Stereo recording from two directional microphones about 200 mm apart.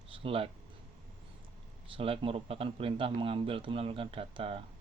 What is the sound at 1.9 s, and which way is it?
Speech, 25° right (ahead or behind).